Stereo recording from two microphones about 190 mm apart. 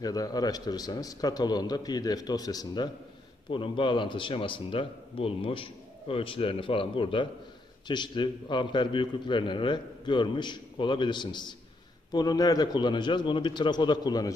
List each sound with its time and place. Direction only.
0.0 s a man's voice: 20° left (ahead or behind)